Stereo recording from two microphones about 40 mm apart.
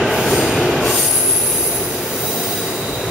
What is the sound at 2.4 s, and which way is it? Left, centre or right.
Train wheels squealing, centre.